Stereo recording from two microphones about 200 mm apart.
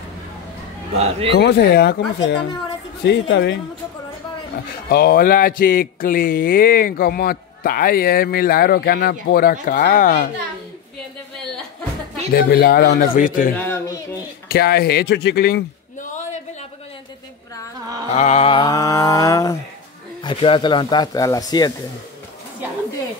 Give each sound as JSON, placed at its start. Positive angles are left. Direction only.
{"t": 0.9, "sound": "speech", "side_deg": -30}
{"t": 1.3, "sound": "speech", "side_deg": 55}
{"t": 4.8, "sound": "speech", "side_deg": 50}
{"t": 12.4, "sound": "speech", "side_deg": 50}
{"t": 13.6, "sound": "mantra", "side_deg": 15}
{"t": 14.5, "sound": "speech", "side_deg": 50}
{"t": 18.1, "sound": "mantra", "side_deg": 30}
{"t": 20.2, "sound": "speech", "side_deg": 25}